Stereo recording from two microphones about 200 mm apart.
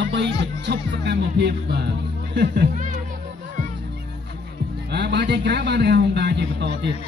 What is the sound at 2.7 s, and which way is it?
Speech, 40° right (ahead or behind).